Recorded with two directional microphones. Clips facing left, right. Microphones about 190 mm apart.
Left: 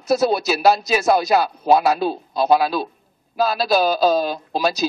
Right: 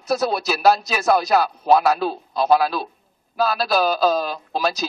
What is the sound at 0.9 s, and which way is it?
Speech, 25° left (ahead or behind).